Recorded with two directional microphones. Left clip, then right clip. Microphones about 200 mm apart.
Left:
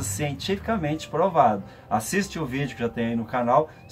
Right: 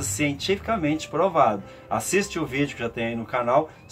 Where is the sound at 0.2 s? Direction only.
15° right (ahead or behind).